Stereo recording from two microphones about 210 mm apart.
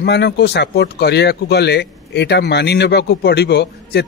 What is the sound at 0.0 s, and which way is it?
Speech, 50° left (ahead or behind).